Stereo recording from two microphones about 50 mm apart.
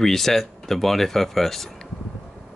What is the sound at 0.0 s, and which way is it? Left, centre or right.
Speech, centre.